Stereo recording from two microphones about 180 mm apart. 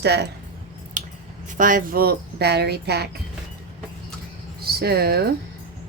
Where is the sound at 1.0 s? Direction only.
45° right (ahead or behind).